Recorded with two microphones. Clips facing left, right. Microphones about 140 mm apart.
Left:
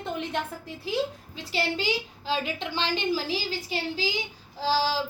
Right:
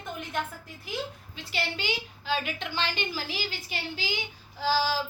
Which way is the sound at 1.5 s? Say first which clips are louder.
Left 5 dB; 35° left (ahead or behind).